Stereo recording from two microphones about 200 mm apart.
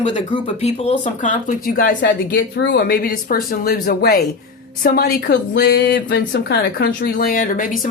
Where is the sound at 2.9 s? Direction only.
45° left (ahead or behind).